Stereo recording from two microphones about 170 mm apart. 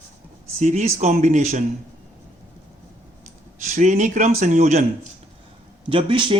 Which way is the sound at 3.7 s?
45° right (ahead or behind).